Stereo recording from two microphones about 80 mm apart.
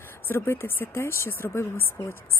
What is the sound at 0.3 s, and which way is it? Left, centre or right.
Speech, left.